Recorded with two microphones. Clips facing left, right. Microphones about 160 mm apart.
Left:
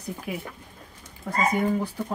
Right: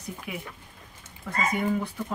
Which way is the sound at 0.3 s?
40° left (ahead or behind).